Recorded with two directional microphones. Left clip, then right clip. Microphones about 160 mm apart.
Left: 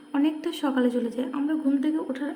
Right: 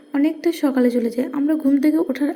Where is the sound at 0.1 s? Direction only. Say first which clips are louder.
Right 6 dB; 20° right (ahead or behind).